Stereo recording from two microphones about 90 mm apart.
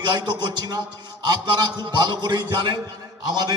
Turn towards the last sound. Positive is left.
turn(degrees=-50)  # may be behind; listen again after turning